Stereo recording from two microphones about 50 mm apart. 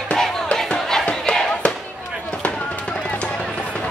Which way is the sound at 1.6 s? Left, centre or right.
Left.